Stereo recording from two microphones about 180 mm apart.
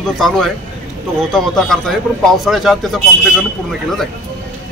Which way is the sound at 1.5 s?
Centre (ahead or behind).